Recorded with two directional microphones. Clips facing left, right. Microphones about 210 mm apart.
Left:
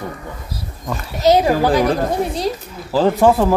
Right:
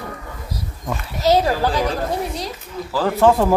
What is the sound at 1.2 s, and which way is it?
Speech, 15° left (ahead or behind).